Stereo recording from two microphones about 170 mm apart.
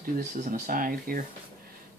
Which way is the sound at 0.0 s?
50° right (ahead or behind).